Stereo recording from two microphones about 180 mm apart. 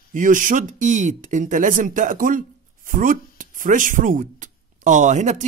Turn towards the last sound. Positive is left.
turn(degrees=-40)  # may be behind; listen again after turning